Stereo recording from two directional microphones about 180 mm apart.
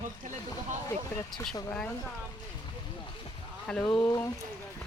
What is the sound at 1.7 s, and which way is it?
Speech, 5° left (ahead or behind).